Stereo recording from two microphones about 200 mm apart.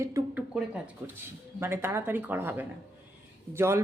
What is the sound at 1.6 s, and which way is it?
Speech, 10° right (ahead or behind).